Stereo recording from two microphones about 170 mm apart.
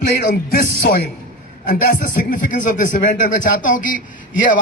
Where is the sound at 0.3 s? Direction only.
60° left (ahead or behind).